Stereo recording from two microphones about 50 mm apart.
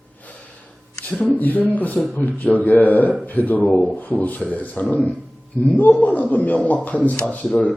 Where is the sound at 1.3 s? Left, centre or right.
Left.